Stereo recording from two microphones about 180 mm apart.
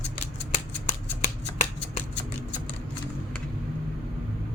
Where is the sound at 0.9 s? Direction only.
45° left (ahead or behind).